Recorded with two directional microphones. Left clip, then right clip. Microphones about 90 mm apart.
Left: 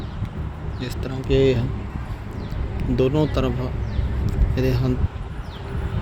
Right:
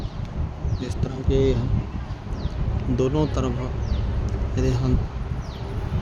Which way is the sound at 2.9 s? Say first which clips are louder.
Left 3 dB; centre (ahead or behind).